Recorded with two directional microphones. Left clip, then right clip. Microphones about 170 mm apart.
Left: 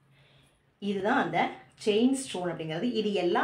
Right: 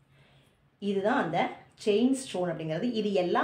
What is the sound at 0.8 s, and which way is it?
A woman's voice, 35° right (ahead or behind).